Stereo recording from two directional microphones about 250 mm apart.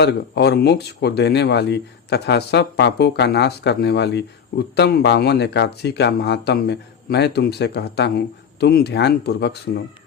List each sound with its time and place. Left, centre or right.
0.0 s speech: left